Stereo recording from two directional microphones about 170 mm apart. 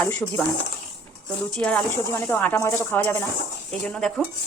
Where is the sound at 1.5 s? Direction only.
5° left (ahead or behind).